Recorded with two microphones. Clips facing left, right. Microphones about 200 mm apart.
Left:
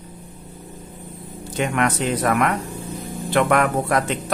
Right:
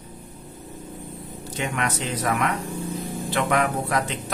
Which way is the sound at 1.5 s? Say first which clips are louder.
Left 6 dB; 55° left (ahead or behind).